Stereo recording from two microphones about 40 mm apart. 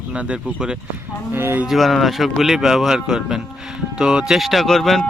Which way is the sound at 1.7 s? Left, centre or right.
Centre.